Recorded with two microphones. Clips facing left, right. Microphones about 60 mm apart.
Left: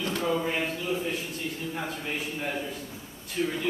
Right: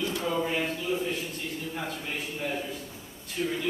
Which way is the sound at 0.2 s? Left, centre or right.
Centre.